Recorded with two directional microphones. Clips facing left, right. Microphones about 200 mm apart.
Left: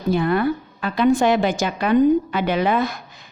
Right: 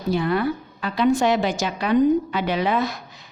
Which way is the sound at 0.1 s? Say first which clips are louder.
Left 3 dB; 55° left (ahead or behind).